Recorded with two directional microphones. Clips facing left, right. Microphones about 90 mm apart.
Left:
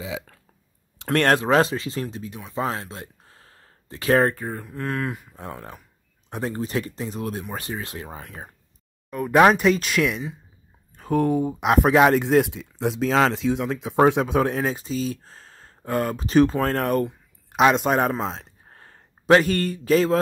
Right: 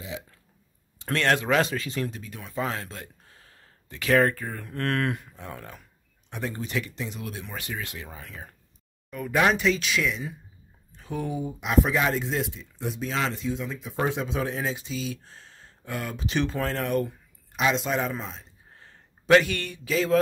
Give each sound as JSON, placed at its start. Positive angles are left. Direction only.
{"t": 1.1, "sound": "speech", "side_deg": 45}
{"t": 1.4, "sound": "speech", "side_deg": 35}
{"t": 4.6, "sound": "speech", "side_deg": 5}
{"t": 5.3, "sound": "speech", "side_deg": 35}
{"t": 9.1, "sound": "speech", "side_deg": 0}
{"t": 9.6, "sound": "speech", "side_deg": 50}
{"t": 10.9, "sound": "speech", "side_deg": 50}
{"t": 18.2, "sound": "speech", "side_deg": 80}
{"t": 18.7, "sound": "a sound", "side_deg": 45}